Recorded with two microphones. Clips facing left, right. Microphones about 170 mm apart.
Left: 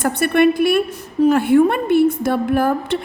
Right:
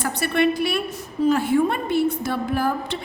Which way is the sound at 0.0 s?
55° left (ahead or behind).